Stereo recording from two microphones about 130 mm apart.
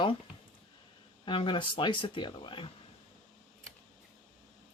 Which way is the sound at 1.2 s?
40° left (ahead or behind).